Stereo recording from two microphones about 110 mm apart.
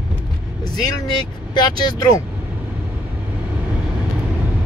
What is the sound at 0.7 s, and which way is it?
Speech, 40° left (ahead or behind).